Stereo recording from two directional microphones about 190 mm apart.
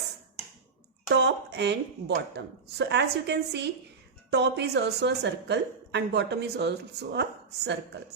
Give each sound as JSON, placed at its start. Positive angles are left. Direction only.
{"t": 1.1, "sound": "a woman's voice", "side_deg": -65}